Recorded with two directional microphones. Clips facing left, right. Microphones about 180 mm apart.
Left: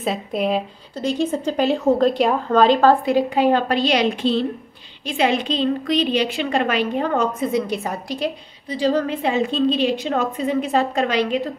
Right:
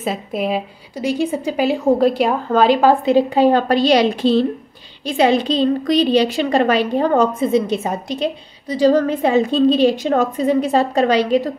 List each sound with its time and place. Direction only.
0.0 s a woman's voice: centre (ahead or behind)
3.1 s a woman's voice: 30° right (ahead or behind)
8.6 s a woman's voice: 40° right (ahead or behind)